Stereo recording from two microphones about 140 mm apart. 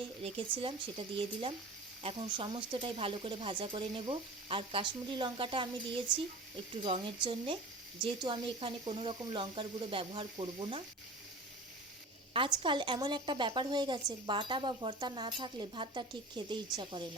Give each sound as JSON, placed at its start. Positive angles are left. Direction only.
{"t": 0.2, "sound": "a woman's voice", "side_deg": -40}
{"t": 6.8, "sound": "a woman's voice", "side_deg": -35}
{"t": 12.3, "sound": "a woman's voice", "side_deg": -35}